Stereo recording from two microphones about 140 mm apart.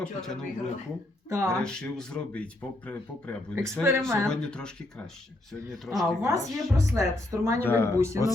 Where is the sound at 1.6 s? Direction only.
5° left (ahead or behind).